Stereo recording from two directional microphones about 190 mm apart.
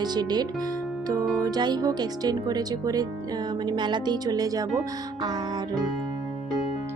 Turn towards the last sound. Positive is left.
turn(degrees=-20)  # may be behind; listen again after turning